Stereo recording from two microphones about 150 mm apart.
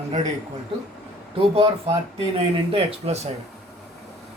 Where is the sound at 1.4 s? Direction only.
40° right (ahead or behind).